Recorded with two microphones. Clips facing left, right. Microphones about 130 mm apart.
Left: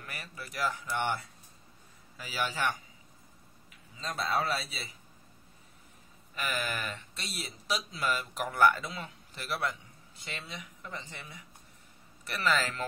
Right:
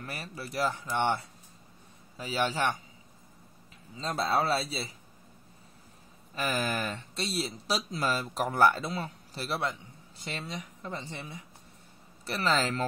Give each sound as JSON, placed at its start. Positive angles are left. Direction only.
{"t": 0.0, "sound": "speech", "side_deg": -35}
{"t": 3.9, "sound": "speech", "side_deg": -30}
{"t": 6.3, "sound": "speech", "side_deg": -35}